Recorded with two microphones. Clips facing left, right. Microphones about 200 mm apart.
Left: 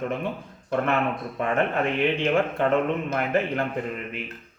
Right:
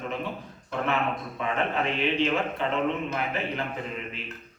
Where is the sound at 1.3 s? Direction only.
50° left (ahead or behind).